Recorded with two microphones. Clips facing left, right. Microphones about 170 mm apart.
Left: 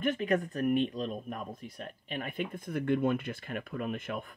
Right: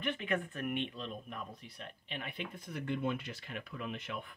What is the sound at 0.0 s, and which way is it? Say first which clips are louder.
Speech: left 7 dB; 40° left (ahead or behind).